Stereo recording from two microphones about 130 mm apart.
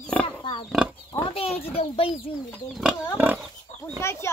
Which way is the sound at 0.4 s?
40° left (ahead or behind).